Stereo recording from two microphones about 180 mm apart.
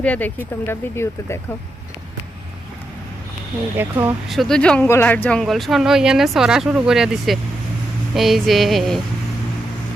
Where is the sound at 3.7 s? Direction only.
15° right (ahead or behind).